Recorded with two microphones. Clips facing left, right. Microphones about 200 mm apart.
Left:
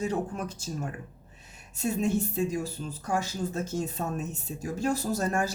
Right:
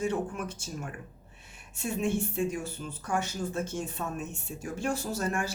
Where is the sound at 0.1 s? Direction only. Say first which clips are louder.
Left 1 dB; 40° left (ahead or behind).